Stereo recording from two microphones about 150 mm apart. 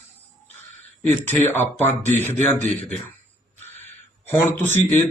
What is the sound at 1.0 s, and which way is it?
Mantra, 10° left (ahead or behind).